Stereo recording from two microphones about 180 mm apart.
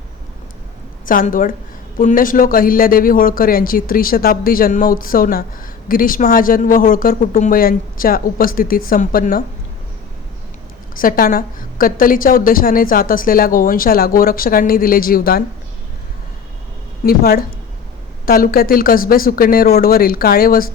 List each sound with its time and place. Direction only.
1.0 s a woman's voice: 50° left (ahead or behind)
10.9 s a woman's voice: 50° left (ahead or behind)
17.0 s speech: 55° left (ahead or behind)